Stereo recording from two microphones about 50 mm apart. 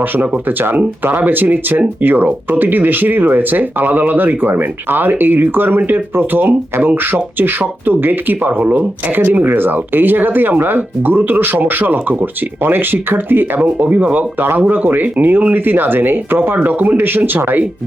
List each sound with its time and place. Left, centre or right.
0.0 s speech: right
13.6 s speech: right